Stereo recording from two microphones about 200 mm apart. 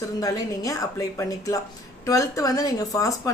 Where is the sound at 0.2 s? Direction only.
15° left (ahead or behind).